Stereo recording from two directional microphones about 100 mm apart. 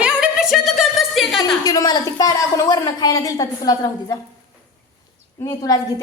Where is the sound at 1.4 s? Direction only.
40° left (ahead or behind).